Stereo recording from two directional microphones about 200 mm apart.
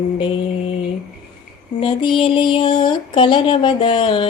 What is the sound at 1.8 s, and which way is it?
Music, 25° left (ahead or behind).